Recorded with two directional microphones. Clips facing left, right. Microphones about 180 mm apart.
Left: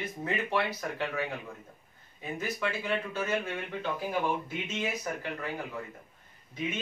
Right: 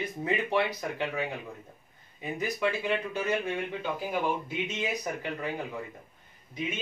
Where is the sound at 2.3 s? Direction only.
15° right (ahead or behind).